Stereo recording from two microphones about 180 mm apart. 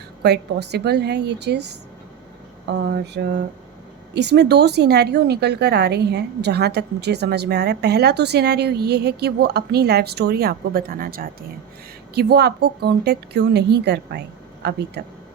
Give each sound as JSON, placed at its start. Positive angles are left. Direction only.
{"t": 0.2, "sound": "a woman's voice", "side_deg": -65}
{"t": 12.1, "sound": "a woman's voice", "side_deg": -65}